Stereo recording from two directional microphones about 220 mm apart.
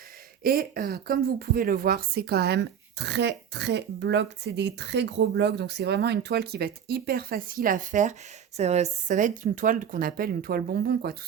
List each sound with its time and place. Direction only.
0.4 s speech: 40° right (ahead or behind)